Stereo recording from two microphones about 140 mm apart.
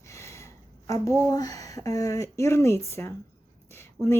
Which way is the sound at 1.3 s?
25° left (ahead or behind).